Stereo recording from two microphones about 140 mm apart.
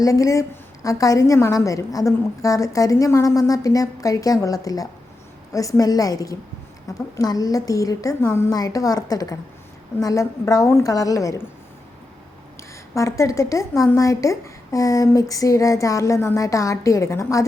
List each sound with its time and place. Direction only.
0.0 s a woman's voice: 25° left (ahead or behind)
12.9 s a woman's voice: 20° left (ahead or behind)